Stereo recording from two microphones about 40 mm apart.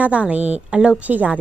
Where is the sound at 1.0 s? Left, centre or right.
Right.